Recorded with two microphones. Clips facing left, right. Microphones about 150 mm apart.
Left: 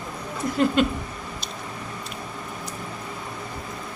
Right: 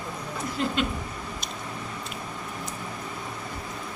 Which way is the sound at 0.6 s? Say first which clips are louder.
Left 7 dB; 55° left (ahead or behind).